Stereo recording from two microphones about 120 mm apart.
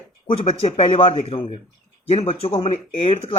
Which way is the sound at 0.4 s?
55° left (ahead or behind).